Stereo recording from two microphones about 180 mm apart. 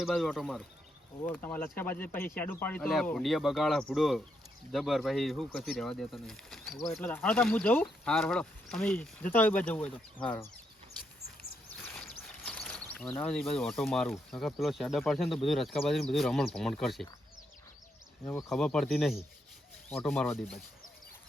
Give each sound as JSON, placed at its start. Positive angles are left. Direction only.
{"t": 0.0, "sound": "speech", "side_deg": 0}
{"t": 1.2, "sound": "speech", "side_deg": 10}
{"t": 11.9, "sound": "a sound", "side_deg": 5}
{"t": 13.6, "sound": "speech", "side_deg": 0}
{"t": 18.5, "sound": "speech", "side_deg": 5}